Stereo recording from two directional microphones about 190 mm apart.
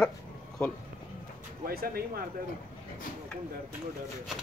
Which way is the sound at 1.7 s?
50° right (ahead or behind).